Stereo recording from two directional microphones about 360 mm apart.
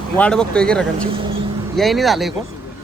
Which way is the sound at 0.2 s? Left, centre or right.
Centre.